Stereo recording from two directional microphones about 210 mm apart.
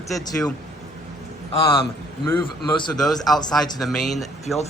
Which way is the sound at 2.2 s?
20° left (ahead or behind).